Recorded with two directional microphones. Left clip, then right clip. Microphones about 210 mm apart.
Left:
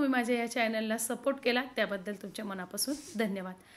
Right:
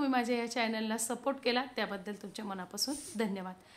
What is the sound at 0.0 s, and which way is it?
A woman's voice, 5° left (ahead or behind).